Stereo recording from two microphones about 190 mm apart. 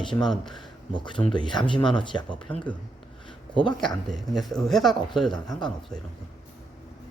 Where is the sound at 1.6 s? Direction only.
25° left (ahead or behind).